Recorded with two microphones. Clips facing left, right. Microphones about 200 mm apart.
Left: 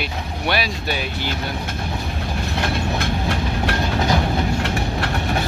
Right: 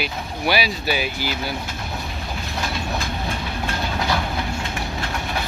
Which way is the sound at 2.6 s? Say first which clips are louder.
Left 4 dB; 65° left (ahead or behind).